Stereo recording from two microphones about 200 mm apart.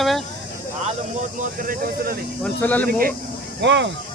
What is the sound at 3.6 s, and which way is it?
Speech, 60° right (ahead or behind).